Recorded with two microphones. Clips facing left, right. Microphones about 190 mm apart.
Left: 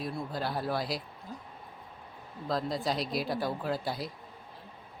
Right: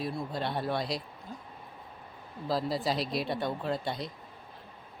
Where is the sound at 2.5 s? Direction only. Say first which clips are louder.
Right 1 dB; 5° right (ahead or behind).